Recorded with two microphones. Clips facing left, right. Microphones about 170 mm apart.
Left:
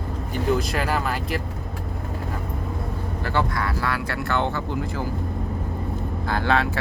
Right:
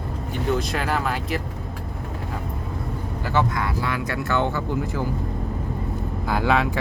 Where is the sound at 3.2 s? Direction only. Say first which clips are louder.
Right 2 dB; 15° right (ahead or behind).